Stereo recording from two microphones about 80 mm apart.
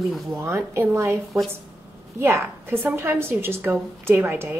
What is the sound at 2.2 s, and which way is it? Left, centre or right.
A woman's voice, right.